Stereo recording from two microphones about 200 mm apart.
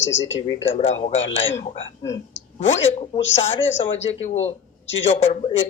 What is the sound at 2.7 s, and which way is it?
Speech, 65° left (ahead or behind).